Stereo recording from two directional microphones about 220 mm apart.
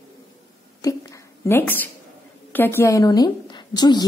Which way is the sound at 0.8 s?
15° left (ahead or behind).